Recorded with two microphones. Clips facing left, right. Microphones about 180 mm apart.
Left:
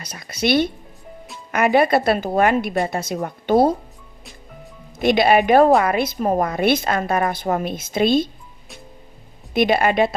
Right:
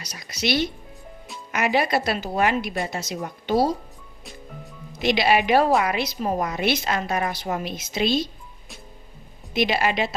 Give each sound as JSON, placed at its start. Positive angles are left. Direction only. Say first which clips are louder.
{"t": 0.0, "sound": "a woman's voice", "louder": "left 5 dB", "side_deg": 55}
{"t": 4.9, "sound": "a woman's voice", "louder": "left 5 dB", "side_deg": 50}
{"t": 9.5, "sound": "a woman's voice", "louder": "left 5 dB", "side_deg": 55}